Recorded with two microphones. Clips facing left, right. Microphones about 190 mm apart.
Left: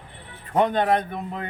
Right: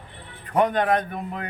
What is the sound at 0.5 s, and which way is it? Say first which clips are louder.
Speech: even; 30° left (ahead or behind).